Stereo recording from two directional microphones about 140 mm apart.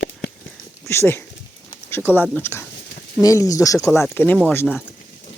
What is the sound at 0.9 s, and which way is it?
Speech, 20° left (ahead or behind).